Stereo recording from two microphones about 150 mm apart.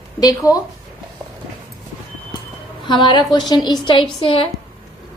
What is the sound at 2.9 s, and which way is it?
A woman's voice, 30° left (ahead or behind).